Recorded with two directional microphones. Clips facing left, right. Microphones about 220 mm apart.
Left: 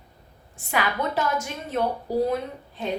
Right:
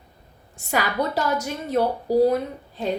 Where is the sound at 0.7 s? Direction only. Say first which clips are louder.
Right 2 dB; 40° right (ahead or behind).